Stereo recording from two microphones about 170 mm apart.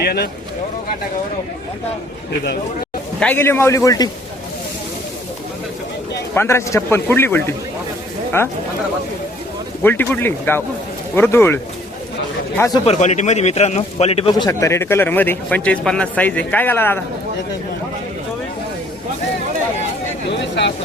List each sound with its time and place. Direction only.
0.0 s speech: 65° left (ahead or behind)
3.2 s a man's voice: 10° left (ahead or behind)
6.3 s a man's voice: 15° left (ahead or behind)
9.8 s a man's voice: 10° left (ahead or behind)
12.7 s a man's voice: 35° left (ahead or behind); by 17.0 s 10° left (ahead or behind)
20.6 s speech: 90° left